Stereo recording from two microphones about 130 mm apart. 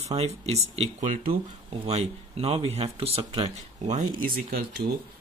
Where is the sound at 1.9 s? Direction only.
50° right (ahead or behind).